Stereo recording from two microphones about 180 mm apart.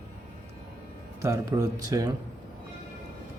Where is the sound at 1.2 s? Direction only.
15° right (ahead or behind).